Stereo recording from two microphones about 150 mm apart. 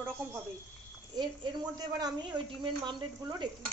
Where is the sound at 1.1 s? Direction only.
30° right (ahead or behind).